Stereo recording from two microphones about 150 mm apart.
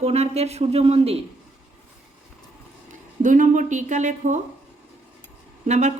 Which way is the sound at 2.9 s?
55° right (ahead or behind).